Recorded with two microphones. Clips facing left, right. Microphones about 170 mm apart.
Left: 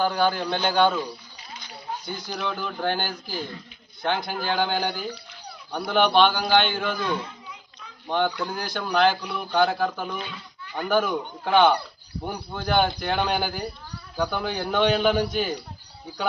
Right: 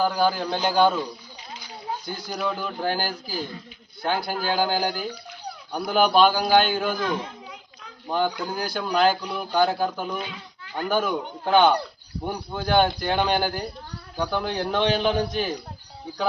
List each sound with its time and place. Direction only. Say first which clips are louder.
0.0 s speech: right 1 dB; 5° right (ahead or behind)
2.0 s speech: right 2 dB; 5° right (ahead or behind)